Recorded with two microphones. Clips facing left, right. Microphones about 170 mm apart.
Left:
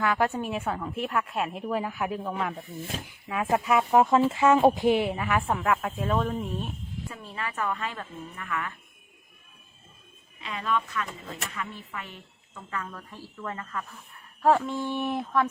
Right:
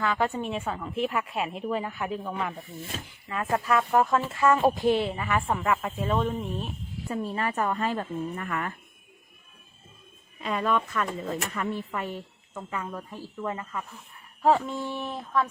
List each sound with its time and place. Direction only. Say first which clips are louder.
0.0 s a woman's voice: left 1 dB; 5° left (ahead or behind)
3.5 s a woman's voice: left 2 dB; 15° left (ahead or behind)
7.1 s a woman's voice: right 10 dB; 35° right (ahead or behind)
10.4 s speech: right 3 dB; 45° right (ahead or behind)
12.7 s a woman's voice: right 2 dB; 15° right (ahead or behind); by 15.4 s 5° left (ahead or behind)